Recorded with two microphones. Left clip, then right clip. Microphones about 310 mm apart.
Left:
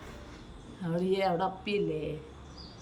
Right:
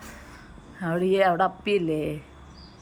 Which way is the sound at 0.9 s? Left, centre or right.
Centre.